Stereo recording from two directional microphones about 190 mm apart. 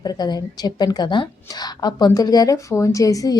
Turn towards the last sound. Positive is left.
turn(degrees=15)  # may be behind; listen again after turning